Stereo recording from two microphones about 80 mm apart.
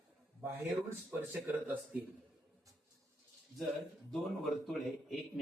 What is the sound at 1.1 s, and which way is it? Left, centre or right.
Speech, centre.